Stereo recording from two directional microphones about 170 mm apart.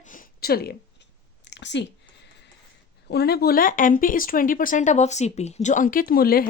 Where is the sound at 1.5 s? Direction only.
90° left.